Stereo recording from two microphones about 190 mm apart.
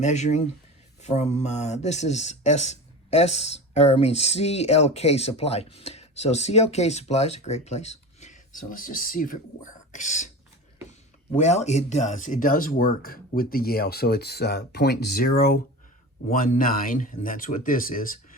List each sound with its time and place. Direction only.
0.0 s speech: 40° left (ahead or behind)
11.3 s speech: 35° left (ahead or behind)